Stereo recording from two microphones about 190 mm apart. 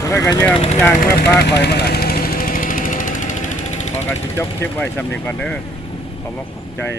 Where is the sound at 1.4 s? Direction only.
60° left (ahead or behind); by 3.9 s 40° left (ahead or behind).